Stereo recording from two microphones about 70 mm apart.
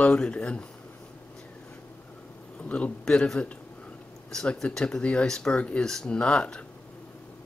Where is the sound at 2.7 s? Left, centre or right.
Centre.